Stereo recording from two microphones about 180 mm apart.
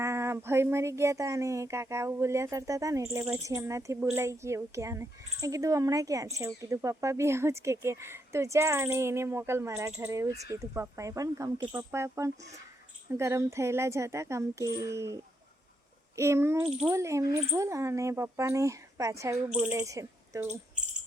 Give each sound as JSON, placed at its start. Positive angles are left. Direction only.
{"t": 0.0, "sound": "speech", "side_deg": -15}